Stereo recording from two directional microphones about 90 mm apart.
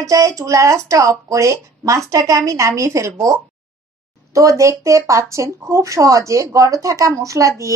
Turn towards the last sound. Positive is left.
turn(degrees=-35)  # may be behind; listen again after turning